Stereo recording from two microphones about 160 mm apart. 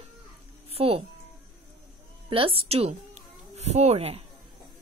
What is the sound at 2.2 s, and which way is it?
A child's voice, 35° right (ahead or behind).